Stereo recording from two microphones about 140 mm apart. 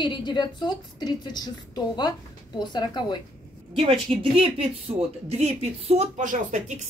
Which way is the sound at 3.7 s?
40° right (ahead or behind).